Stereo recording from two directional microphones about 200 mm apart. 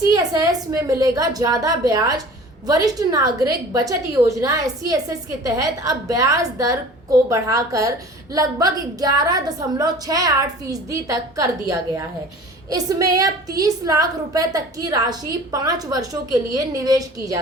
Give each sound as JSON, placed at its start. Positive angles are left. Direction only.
{"t": 0.1, "sound": "a woman's voice", "side_deg": -15}